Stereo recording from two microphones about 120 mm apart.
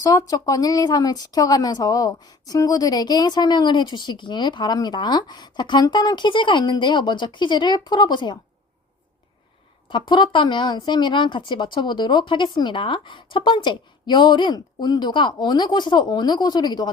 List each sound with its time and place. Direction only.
0.0 s speech: 30° left (ahead or behind)
9.9 s speech: 40° left (ahead or behind)